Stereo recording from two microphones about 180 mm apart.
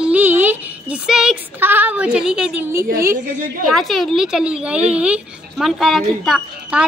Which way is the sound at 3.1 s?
50° right (ahead or behind).